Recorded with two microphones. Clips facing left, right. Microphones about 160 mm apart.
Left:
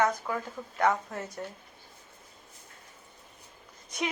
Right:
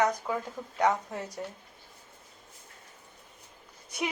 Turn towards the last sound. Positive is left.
turn(degrees=-10)  # may be behind; listen again after turning